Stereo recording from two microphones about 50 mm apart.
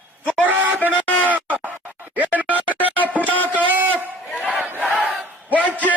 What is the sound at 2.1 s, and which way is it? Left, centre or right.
Music, right.